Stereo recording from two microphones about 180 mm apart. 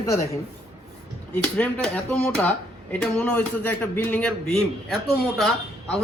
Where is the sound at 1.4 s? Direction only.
5° left (ahead or behind).